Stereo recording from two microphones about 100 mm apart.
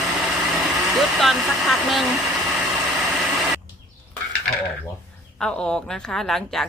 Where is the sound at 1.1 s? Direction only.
Centre (ahead or behind).